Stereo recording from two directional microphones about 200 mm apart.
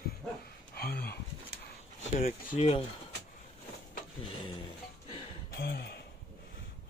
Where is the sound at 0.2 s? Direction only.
Centre (ahead or behind).